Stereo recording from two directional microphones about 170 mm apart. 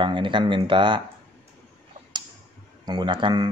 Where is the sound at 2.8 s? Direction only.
25° right (ahead or behind).